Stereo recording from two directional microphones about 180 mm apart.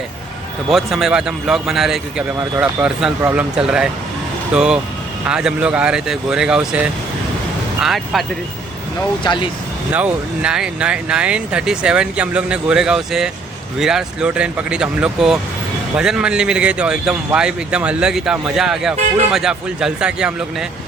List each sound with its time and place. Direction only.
0.7 s speech: centre (ahead or behind)
9.2 s speech: 25° left (ahead or behind)
9.9 s speech: 5° right (ahead or behind)